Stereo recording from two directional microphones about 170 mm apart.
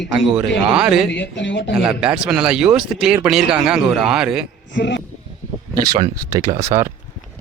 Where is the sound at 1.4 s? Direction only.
90° left.